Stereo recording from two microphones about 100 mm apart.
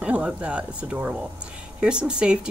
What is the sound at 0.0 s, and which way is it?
Speech, 10° right (ahead or behind).